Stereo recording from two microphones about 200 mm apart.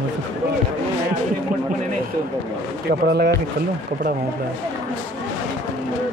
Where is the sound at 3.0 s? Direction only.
55° right (ahead or behind).